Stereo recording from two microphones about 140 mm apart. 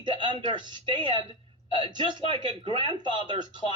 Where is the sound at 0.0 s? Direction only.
35° right (ahead or behind).